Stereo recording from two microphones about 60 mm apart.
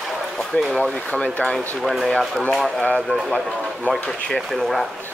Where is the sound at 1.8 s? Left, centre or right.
Centre.